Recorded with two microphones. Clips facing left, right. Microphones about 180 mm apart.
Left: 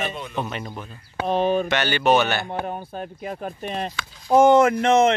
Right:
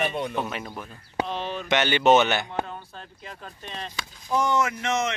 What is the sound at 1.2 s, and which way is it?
Speech, 55° left (ahead or behind).